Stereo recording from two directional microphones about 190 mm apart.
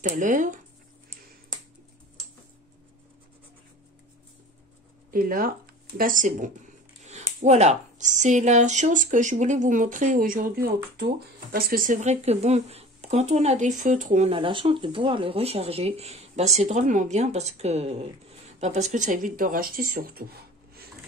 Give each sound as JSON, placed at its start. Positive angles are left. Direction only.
{"t": 0.0, "sound": "speech", "side_deg": -40}
{"t": 5.1, "sound": "speech", "side_deg": -50}
{"t": 7.0, "sound": "a sound", "side_deg": -35}
{"t": 7.3, "sound": "speech", "side_deg": -35}